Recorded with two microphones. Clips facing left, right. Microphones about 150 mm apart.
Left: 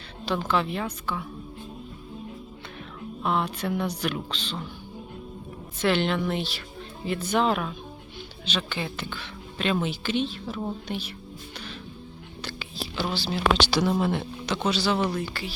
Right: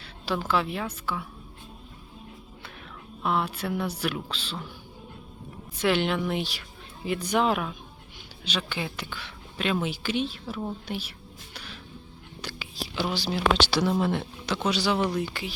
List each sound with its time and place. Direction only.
0.3 s speech: 5° right (ahead or behind)
3.2 s a woman's voice: 5° right (ahead or behind)
5.8 s a woman's voice: 10° right (ahead or behind)
11.5 s music: 10° right (ahead or behind)
12.4 s a woman's voice: 10° right (ahead or behind)